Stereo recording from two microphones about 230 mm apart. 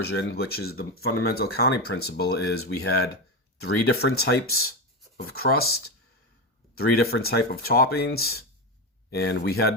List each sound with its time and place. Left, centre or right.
0.0 s speech: left
3.6 s speech: left